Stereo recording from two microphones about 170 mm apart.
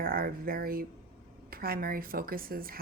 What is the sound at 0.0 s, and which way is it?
Speech, 60° right (ahead or behind).